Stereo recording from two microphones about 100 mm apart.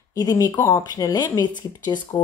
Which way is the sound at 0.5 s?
25° left (ahead or behind).